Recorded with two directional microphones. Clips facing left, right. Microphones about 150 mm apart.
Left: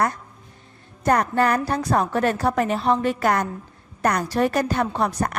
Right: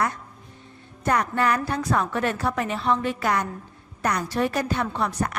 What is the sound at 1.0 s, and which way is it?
A woman's voice, 40° left (ahead or behind).